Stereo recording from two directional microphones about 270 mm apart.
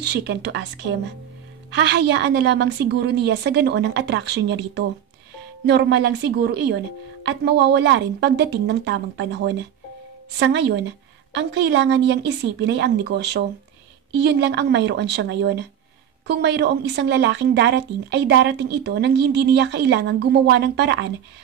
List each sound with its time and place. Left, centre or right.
0.0 s a woman's voice: right